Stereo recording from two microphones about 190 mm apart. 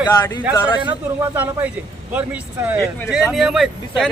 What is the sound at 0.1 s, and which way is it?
Speech, 20° left (ahead or behind).